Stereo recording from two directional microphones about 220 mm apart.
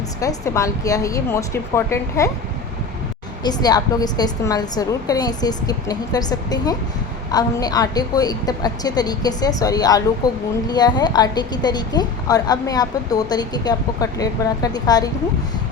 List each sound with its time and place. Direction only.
0.2 s a woman's voice: 15° left (ahead or behind)
3.4 s a woman's voice: 20° left (ahead or behind)